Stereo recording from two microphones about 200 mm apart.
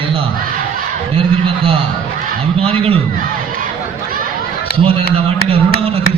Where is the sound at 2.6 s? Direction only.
30° right (ahead or behind).